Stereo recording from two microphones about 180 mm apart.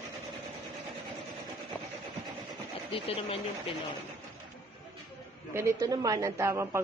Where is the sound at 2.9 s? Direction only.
30° left (ahead or behind).